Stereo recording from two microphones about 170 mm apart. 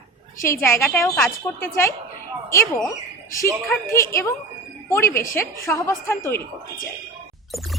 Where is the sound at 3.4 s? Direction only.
15° left (ahead or behind).